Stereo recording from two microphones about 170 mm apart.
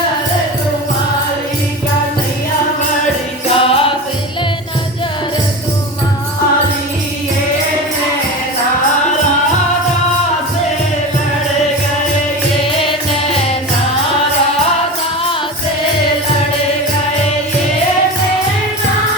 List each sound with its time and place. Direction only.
3.5 s music: 35° left (ahead or behind)